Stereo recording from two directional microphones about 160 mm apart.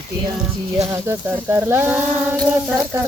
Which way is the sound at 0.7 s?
15° right (ahead or behind).